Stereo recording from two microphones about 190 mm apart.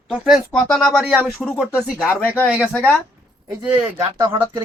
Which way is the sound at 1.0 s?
10° right (ahead or behind).